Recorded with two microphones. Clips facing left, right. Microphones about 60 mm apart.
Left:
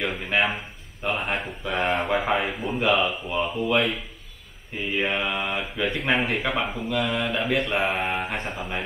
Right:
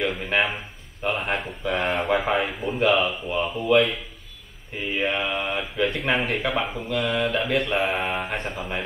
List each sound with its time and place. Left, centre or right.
0.0 s speech: centre